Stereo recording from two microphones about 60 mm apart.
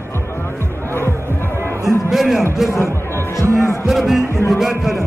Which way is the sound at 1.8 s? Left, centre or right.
Centre.